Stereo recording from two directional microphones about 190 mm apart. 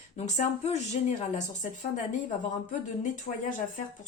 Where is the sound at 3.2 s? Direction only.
45° left (ahead or behind).